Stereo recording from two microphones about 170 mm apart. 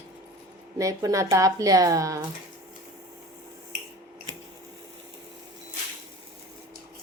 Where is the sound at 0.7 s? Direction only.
20° right (ahead or behind).